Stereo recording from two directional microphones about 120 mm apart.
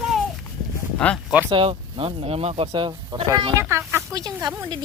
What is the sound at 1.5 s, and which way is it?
Speech, 50° right (ahead or behind).